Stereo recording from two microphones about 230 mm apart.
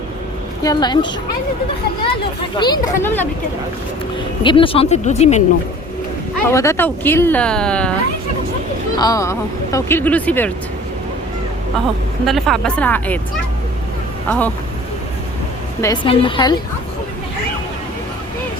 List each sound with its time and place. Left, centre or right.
0.6 s speech: centre
2.6 s speech: centre
4.4 s speech: left
6.5 s speech: centre
9.0 s speech: centre
12.2 s speech: centre
14.3 s speech: centre
15.8 s speech: centre